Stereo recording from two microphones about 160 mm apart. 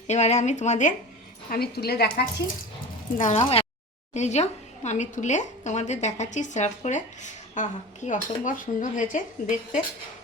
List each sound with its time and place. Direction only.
0.1 s a woman's voice: 45° left (ahead or behind)
1.5 s a woman's voice: 75° left (ahead or behind)
3.2 s a woman's voice: 45° left (ahead or behind)